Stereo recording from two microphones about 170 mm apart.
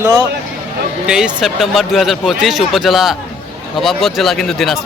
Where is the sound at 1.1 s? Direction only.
5° right (ahead or behind).